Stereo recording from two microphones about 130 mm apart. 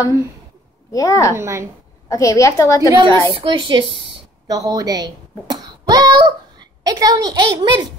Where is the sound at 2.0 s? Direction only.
25° left (ahead or behind).